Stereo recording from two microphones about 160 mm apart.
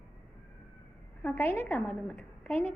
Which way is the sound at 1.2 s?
15° left (ahead or behind).